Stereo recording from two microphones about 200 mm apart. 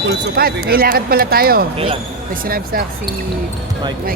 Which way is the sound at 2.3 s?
45° right (ahead or behind).